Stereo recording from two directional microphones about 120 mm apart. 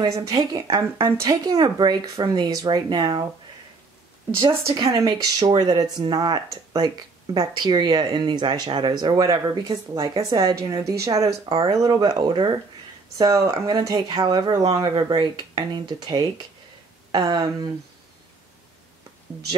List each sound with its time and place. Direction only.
0.0 s a woman's voice: 35° right (ahead or behind)
4.7 s a woman's voice: 30° right (ahead or behind)
13.2 s a woman's voice: 25° right (ahead or behind)